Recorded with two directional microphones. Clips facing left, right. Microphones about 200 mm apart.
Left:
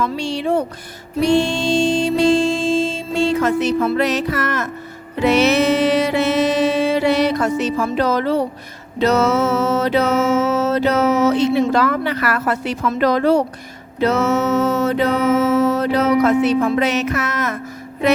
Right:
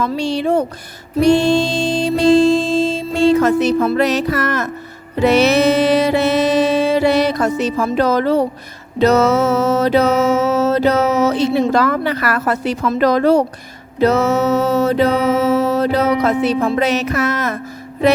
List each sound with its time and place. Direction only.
0.0 s mantra: 35° right (ahead or behind)
1.2 s music: 40° right (ahead or behind)
9.0 s mantra: 40° right (ahead or behind)